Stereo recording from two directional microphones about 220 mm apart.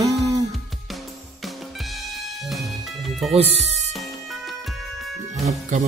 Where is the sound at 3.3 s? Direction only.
25° right (ahead or behind).